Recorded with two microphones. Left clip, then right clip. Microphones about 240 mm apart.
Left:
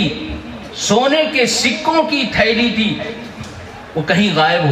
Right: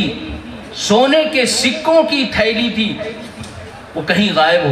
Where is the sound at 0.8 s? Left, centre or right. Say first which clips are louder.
Right 2 dB; right.